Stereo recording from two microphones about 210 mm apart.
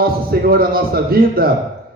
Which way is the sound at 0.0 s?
45° right (ahead or behind).